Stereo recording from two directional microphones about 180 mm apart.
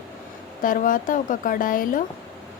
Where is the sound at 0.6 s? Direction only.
50° left (ahead or behind).